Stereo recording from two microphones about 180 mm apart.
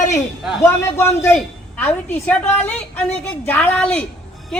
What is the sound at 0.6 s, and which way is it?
A woman's voice, 15° left (ahead or behind).